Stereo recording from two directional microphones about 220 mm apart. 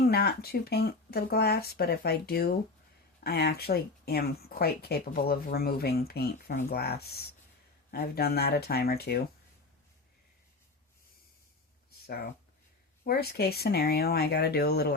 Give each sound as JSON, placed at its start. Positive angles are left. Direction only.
{"t": 0.0, "sound": "speech", "side_deg": 45}
{"t": 11.9, "sound": "a sound", "side_deg": 45}
{"t": 13.1, "sound": "speech", "side_deg": 45}